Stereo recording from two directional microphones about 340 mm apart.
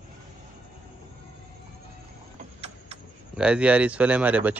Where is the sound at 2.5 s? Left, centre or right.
Centre.